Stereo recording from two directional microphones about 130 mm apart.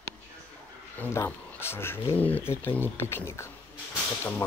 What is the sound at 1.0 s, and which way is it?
Speech, 15° left (ahead or behind).